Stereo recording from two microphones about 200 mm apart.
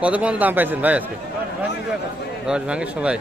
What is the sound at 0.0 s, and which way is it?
A man's voice, 5° right (ahead or behind).